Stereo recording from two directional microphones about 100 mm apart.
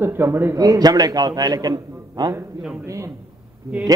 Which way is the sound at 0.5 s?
35° right (ahead or behind).